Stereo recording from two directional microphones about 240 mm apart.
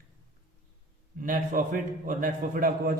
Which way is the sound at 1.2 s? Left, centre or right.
Right.